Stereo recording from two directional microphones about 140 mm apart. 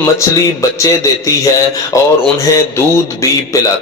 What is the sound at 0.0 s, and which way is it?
A man's voice, 20° left (ahead or behind).